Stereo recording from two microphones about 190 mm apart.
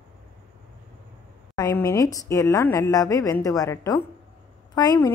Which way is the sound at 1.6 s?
20° left (ahead or behind).